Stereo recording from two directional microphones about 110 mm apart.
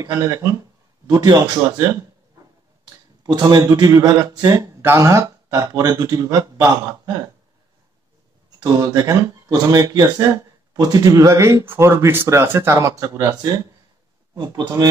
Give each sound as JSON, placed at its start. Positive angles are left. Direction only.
{"t": 0.1, "sound": "a man's voice", "side_deg": -30}
{"t": 3.3, "sound": "speech", "side_deg": -40}
{"t": 8.6, "sound": "speech", "side_deg": -35}